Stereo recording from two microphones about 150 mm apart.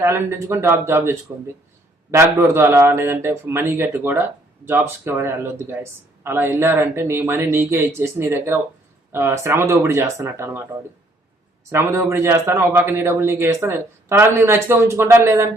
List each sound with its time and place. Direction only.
0.0 s speech: 15° right (ahead or behind)
11.7 s speech: 20° right (ahead or behind)